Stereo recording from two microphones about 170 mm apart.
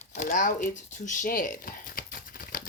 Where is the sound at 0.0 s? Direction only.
45° left (ahead or behind).